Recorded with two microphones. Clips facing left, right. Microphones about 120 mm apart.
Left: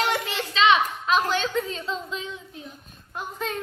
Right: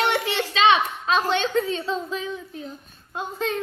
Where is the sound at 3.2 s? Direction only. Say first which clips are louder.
Right 4 dB; 30° right (ahead or behind).